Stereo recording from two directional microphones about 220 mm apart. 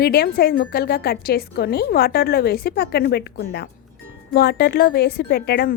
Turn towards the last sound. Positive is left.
turn(degrees=45)  # may be behind; listen again after turning